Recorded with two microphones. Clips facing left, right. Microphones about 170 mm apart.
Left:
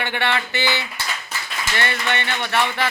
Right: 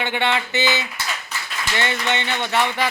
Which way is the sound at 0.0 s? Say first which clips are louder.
Right 1 dB; 20° right (ahead or behind).